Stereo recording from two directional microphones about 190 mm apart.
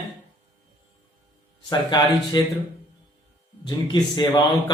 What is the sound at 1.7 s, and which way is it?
Speech, 25° left (ahead or behind).